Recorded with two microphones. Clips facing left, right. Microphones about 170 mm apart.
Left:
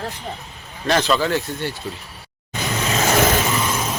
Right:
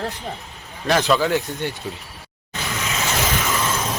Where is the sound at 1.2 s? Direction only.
15° right (ahead or behind).